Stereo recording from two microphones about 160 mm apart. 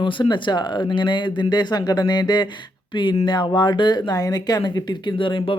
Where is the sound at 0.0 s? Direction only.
30° left (ahead or behind).